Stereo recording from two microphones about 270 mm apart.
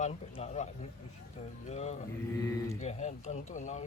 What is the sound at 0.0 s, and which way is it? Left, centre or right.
Speech, left.